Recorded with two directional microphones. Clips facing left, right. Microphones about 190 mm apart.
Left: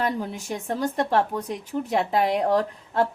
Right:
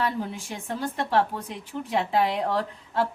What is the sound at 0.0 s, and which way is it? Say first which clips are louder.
A woman's voice: left 2 dB; 40° left (ahead or behind).